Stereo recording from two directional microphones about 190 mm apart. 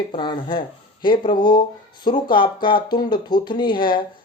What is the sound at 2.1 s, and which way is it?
Speech, 25° left (ahead or behind).